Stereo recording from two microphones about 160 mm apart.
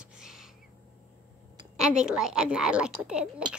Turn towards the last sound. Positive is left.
turn(degrees=-5)  # may be behind; listen again after turning